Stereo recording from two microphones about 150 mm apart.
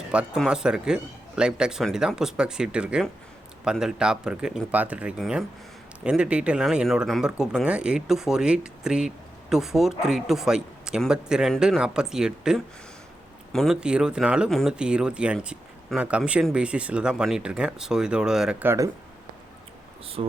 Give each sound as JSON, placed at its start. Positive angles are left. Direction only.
{"t": 0.1, "sound": "speech", "side_deg": -5}
{"t": 20.2, "sound": "speech", "side_deg": -40}